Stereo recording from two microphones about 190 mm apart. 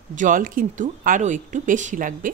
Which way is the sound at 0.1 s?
45° right (ahead or behind).